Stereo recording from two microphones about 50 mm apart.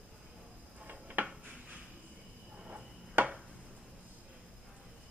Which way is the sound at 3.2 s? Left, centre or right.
Right.